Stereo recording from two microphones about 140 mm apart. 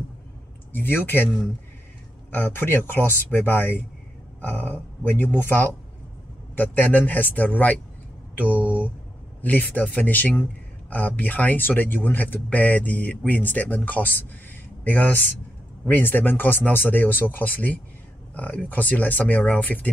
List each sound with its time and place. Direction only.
0.7 s speech: 15° left (ahead or behind)